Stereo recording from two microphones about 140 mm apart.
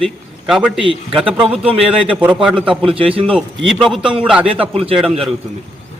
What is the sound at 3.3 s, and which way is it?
Speech, centre (ahead or behind).